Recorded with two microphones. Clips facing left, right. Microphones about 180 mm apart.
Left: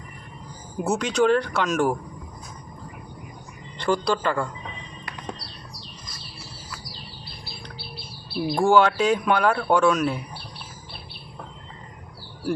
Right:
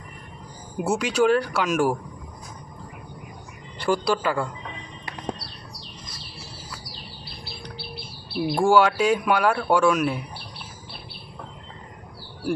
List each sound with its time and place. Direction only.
0.8 s speech: 10° right (ahead or behind)
3.8 s speech: 10° right (ahead or behind)
8.4 s speech: 10° right (ahead or behind)